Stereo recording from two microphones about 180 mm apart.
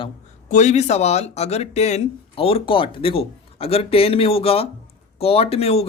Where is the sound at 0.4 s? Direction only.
40° left (ahead or behind).